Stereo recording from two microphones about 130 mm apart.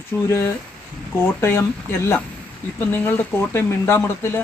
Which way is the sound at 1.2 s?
20° left (ahead or behind).